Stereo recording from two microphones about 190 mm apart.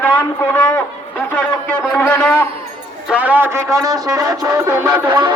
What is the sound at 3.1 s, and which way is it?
Speech, 10° right (ahead or behind).